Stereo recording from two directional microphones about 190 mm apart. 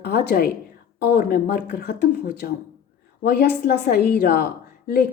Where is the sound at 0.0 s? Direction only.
55° left (ahead or behind).